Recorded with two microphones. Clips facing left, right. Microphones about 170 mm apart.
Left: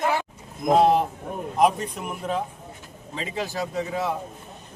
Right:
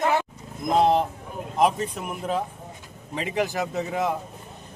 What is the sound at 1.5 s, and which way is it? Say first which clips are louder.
Speech: left 1 dB; centre (ahead or behind).